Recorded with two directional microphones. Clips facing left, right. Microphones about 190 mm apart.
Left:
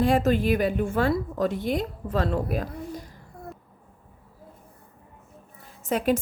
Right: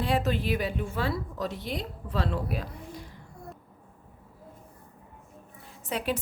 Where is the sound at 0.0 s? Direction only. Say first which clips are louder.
Left 6 dB; 45° left (ahead or behind).